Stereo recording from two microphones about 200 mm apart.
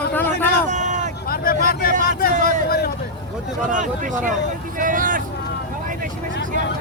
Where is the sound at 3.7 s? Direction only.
40° right (ahead or behind).